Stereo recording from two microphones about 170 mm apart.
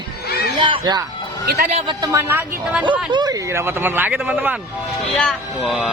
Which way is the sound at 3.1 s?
25° right (ahead or behind).